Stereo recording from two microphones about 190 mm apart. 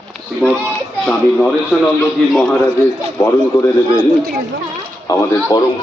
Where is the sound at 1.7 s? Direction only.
Centre (ahead or behind).